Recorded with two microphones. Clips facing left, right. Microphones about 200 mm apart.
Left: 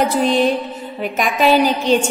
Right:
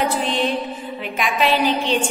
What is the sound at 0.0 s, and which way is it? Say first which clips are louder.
A woman's voice: left 6 dB; 40° left (ahead or behind).